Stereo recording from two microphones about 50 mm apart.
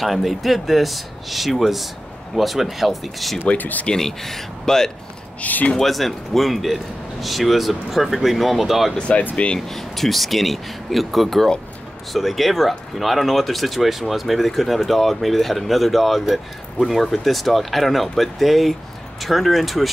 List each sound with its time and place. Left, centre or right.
0.0 s speech: centre
3.4 s speech: left
3.8 s speech: centre
5.4 s speech: left
5.8 s speech: centre
8.9 s speech: left
9.2 s speech: left
9.6 s speech: centre